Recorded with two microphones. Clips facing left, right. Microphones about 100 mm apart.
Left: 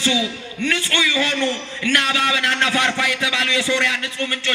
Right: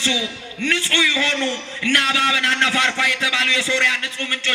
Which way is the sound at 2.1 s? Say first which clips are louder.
Even; 20° left (ahead or behind).